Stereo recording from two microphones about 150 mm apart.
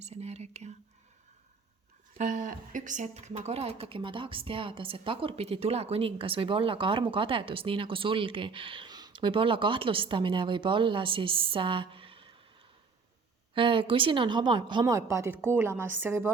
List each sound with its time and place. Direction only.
0.0 s speech: 45° right (ahead or behind)
2.1 s a woman's voice: 55° right (ahead or behind); by 12.3 s 35° right (ahead or behind)
13.5 s a woman's voice: 35° right (ahead or behind); by 16.3 s 15° right (ahead or behind)